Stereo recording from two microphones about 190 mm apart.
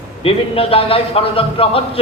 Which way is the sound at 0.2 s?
30° left (ahead or behind).